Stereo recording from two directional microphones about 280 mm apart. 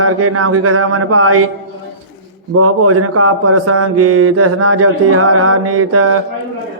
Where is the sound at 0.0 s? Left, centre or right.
Right.